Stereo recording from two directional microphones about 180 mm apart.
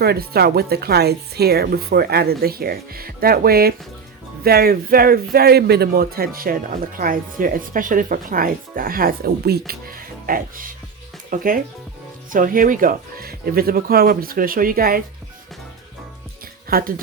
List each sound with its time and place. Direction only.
0.0 s a woman's voice: 60° right (ahead or behind)
16.6 s speech: 55° right (ahead or behind)